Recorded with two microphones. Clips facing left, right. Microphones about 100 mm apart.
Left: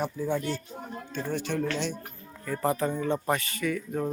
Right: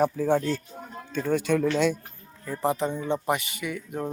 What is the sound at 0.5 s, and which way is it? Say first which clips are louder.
Speech: right 2 dB; 15° left (ahead or behind).